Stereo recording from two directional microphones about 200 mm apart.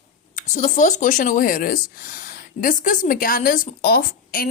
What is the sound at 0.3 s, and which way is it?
Speech, 40° left (ahead or behind).